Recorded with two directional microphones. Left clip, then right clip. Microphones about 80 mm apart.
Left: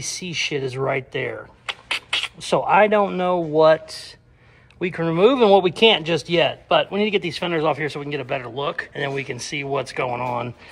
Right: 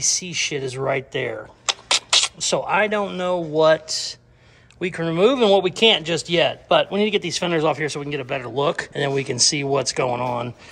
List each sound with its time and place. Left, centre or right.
0.2 s speech: centre
1.7 s a sound: right
2.5 s speech: centre
7.2 s speech: right
8.9 s speech: right
10.2 s speech: right